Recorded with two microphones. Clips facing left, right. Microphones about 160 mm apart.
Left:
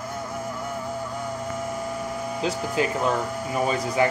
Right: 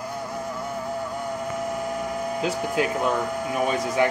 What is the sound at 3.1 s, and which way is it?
Speech, 15° right (ahead or behind).